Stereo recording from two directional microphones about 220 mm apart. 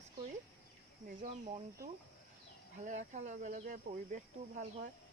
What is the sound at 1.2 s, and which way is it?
Speech, 30° right (ahead or behind).